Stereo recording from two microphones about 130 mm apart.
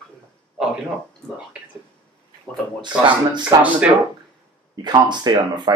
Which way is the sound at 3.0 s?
35° right (ahead or behind).